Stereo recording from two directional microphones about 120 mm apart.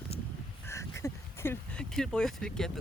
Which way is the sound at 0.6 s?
25° left (ahead or behind).